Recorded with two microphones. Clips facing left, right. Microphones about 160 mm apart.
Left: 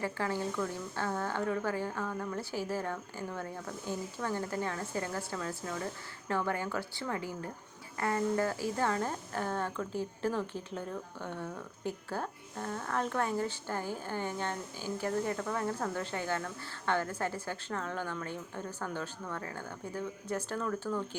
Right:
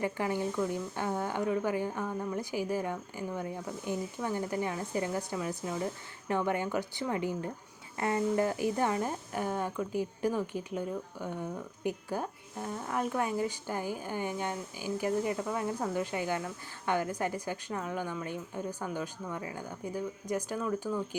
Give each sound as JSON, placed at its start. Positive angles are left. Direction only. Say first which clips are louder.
{"t": 0.0, "sound": "a woman's voice", "louder": "right 2 dB", "side_deg": -15}